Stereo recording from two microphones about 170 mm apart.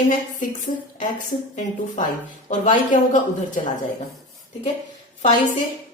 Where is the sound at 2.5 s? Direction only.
50° left (ahead or behind).